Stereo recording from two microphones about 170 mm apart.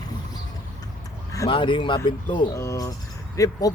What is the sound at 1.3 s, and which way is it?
Speech, 25° left (ahead or behind).